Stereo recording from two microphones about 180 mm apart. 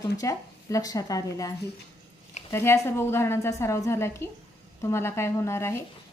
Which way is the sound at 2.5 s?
15° left (ahead or behind).